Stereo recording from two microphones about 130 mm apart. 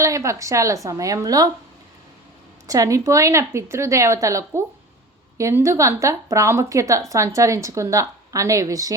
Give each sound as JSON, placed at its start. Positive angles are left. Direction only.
{"t": 0.0, "sound": "a woman's voice", "side_deg": -25}
{"t": 2.6, "sound": "a woman's voice", "side_deg": -25}